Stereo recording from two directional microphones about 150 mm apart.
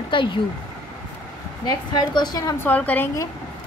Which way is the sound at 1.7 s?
30° left (ahead or behind).